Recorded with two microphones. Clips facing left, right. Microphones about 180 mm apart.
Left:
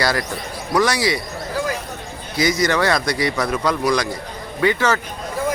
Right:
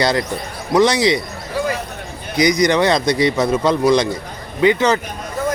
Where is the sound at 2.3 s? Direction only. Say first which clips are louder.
Right 4 dB; 20° right (ahead or behind).